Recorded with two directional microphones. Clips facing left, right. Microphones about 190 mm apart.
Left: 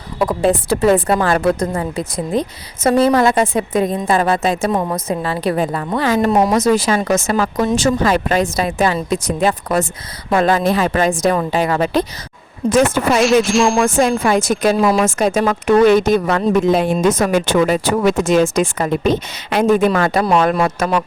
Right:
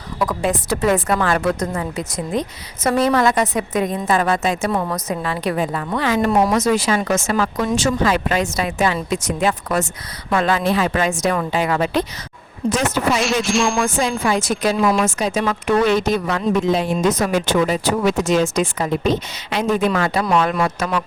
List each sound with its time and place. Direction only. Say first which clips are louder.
0.2 s a woman's voice: left 5 dB; 30° left (ahead or behind)
4.7 s a woman's voice: left 3 dB; 20° left (ahead or behind); by 12.0 s 40° left (ahead or behind)
12.7 s a woman's voice: left 6 dB; 55° left (ahead or behind)
13.4 s music: left 4 dB; centre (ahead or behind)
13.7 s a woman's voice: left 5 dB; 45° left (ahead or behind)
14.8 s a woman's voice: left 3 dB; 35° left (ahead or behind)
15.2 s a woman's voice: left 5 dB; 50° left (ahead or behind)